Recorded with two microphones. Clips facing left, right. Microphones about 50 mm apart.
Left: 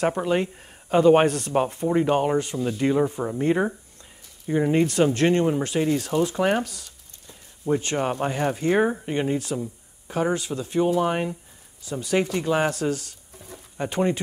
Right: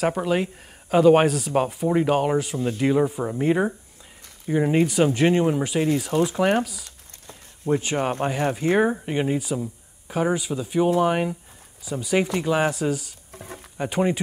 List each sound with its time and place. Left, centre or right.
0.0 s speech: centre
13.3 s insect: right
13.7 s speech: centre